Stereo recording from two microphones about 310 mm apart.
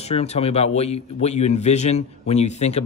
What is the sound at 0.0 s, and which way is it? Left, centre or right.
A man's voice, centre.